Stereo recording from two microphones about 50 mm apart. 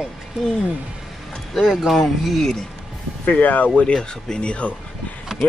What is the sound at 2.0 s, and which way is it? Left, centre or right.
Speech, centre.